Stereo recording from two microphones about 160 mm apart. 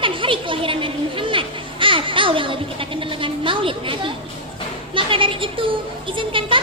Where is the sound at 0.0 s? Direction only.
30° right (ahead or behind).